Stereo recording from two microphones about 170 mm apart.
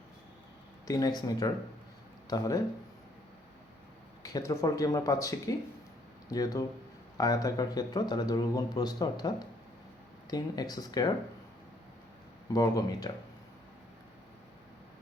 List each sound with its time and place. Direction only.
0.9 s speech: 20° left (ahead or behind)
4.2 s speech: 20° left (ahead or behind)
12.5 s speech: 20° left (ahead or behind)